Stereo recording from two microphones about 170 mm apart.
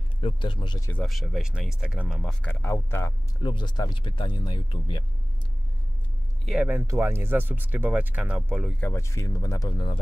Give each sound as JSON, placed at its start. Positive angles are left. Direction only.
{"t": 0.2, "sound": "speech", "side_deg": 30}
{"t": 1.0, "sound": "speech", "side_deg": 0}
{"t": 2.6, "sound": "speech", "side_deg": 15}
{"t": 3.4, "sound": "speech", "side_deg": 25}
{"t": 6.4, "sound": "speech", "side_deg": 0}
{"t": 6.7, "sound": "speech", "side_deg": -15}
{"t": 8.8, "sound": "speech", "side_deg": 15}